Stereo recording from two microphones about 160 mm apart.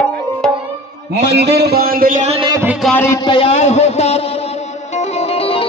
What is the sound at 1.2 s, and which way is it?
A man's voice, 90° right.